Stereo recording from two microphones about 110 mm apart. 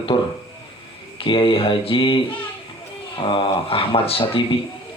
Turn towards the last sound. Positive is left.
turn(degrees=60)  # may be behind; listen again after turning